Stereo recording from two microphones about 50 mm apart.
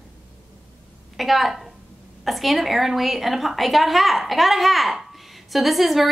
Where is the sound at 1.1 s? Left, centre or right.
Centre.